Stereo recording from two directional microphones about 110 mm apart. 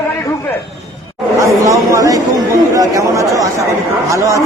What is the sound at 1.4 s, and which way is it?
A man's voice, 30° right (ahead or behind).